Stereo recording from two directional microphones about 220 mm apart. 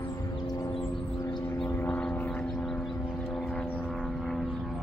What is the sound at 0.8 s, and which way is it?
Vehicle, 5° left (ahead or behind).